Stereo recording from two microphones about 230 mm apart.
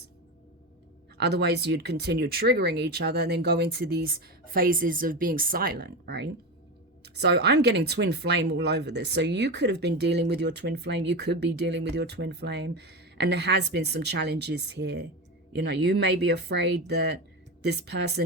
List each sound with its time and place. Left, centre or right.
1.2 s speech: right